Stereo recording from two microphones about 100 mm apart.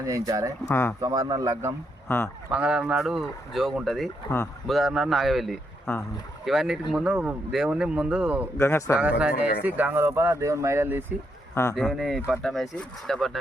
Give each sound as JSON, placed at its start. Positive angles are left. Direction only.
{"t": 0.0, "sound": "speech", "side_deg": -35}
{"t": 0.7, "sound": "speech", "side_deg": 25}
{"t": 1.0, "sound": "speech", "side_deg": -40}
{"t": 2.0, "sound": "speech", "side_deg": 25}
{"t": 2.5, "sound": "a man's voice", "side_deg": -5}
{"t": 8.5, "sound": "speech", "side_deg": 25}
{"t": 9.0, "sound": "speech", "side_deg": -10}
{"t": 11.7, "sound": "speech", "side_deg": 0}